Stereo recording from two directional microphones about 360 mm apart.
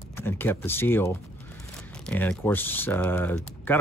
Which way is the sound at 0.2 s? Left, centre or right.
Centre.